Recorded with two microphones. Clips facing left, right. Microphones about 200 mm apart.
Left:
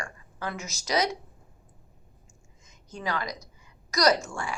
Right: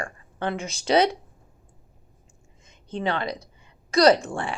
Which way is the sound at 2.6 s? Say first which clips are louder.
Right 7 dB; 30° right (ahead or behind).